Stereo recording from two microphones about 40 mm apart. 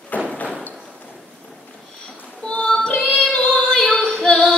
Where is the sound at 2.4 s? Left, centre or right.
Left.